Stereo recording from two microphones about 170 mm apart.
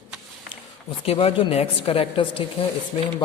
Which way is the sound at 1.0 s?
30° left (ahead or behind).